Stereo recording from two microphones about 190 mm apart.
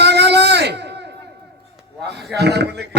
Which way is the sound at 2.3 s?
60° right (ahead or behind).